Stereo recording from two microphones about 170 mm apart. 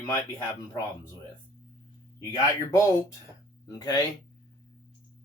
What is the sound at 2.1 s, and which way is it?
Speech, 15° left (ahead or behind).